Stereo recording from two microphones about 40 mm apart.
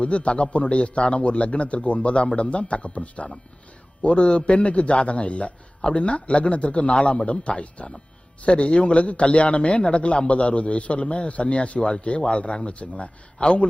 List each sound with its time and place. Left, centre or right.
0.0 s a man's voice: left